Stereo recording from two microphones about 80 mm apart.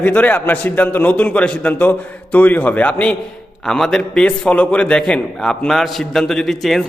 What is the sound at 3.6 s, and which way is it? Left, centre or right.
A man's voice, centre.